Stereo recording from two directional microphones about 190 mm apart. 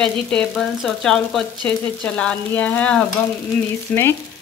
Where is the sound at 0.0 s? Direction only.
5° left (ahead or behind).